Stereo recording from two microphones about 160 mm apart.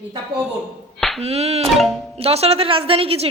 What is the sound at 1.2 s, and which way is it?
A woman's voice, 40° right (ahead or behind).